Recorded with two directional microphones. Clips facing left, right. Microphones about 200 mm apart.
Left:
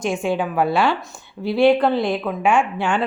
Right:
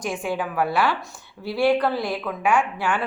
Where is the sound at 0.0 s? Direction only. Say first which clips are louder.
Left 5 dB; 25° left (ahead or behind).